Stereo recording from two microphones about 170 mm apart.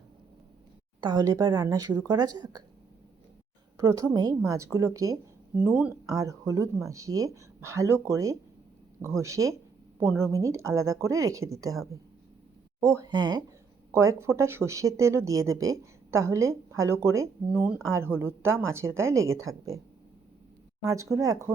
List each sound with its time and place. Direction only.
1.0 s speech: 25° right (ahead or behind)
3.8 s speech: 20° right (ahead or behind)
20.8 s speech: 20° right (ahead or behind)